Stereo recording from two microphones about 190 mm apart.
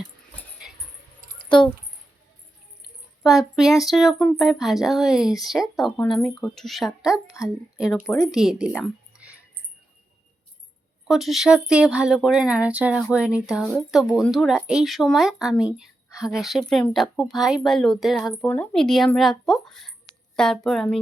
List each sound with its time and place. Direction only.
1.2 s a sound: 45° right (ahead or behind)
3.2 s a woman's voice: centre (ahead or behind)
11.1 s speech: centre (ahead or behind)